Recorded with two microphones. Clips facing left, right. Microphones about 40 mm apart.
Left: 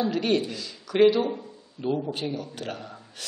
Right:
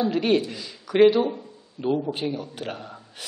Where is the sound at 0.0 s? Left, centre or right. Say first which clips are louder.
Right 3 dB; centre.